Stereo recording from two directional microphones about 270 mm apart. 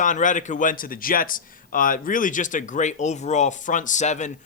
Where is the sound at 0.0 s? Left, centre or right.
Left.